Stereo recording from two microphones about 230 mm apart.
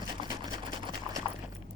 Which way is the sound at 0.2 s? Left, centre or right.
Centre.